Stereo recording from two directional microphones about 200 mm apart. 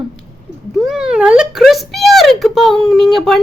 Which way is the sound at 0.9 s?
5° right (ahead or behind).